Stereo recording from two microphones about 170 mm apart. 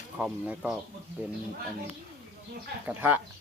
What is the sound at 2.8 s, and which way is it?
Speech, 10° right (ahead or behind).